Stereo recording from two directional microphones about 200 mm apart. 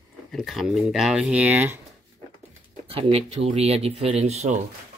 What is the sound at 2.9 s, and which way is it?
Speech, 25° right (ahead or behind).